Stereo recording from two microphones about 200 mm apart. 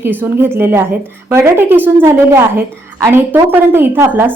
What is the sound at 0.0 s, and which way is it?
A woman's voice, 10° right (ahead or behind).